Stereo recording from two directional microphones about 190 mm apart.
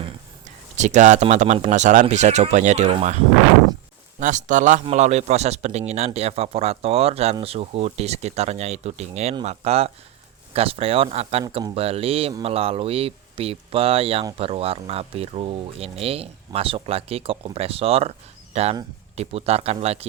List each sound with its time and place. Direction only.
0.0 s speech: 40° right (ahead or behind)
4.2 s speech: 40° right (ahead or behind)